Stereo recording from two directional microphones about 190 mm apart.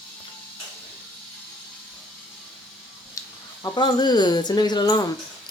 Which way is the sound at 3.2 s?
20° left (ahead or behind).